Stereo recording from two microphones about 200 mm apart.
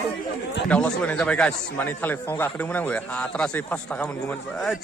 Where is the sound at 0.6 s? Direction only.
5° left (ahead or behind).